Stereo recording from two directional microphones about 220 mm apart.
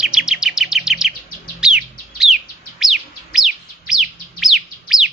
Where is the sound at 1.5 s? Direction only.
5° right (ahead or behind).